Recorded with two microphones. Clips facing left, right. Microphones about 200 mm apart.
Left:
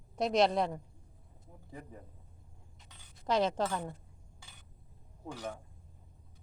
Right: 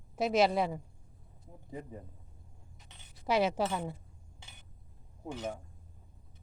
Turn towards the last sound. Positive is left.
turn(degrees=-20)  # may be behind; listen again after turning